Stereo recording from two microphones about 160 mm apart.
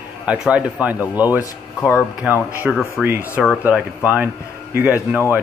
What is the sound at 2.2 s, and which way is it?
Speech, 10° right (ahead or behind).